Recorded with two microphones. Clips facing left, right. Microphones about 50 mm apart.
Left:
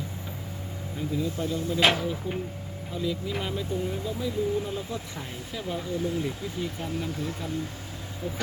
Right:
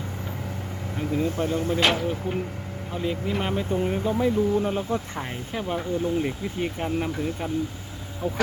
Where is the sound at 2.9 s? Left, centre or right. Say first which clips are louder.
Right 3 dB; right.